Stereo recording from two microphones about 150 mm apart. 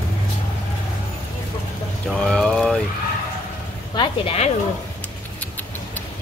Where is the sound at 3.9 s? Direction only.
35° left (ahead or behind).